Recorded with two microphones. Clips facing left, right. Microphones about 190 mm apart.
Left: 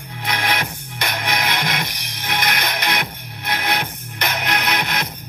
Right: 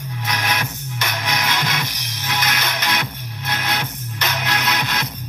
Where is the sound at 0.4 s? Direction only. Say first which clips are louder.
Left 3 dB; 60° left (ahead or behind).